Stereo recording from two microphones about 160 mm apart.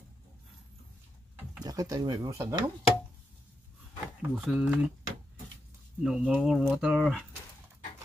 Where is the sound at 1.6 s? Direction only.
25° right (ahead or behind).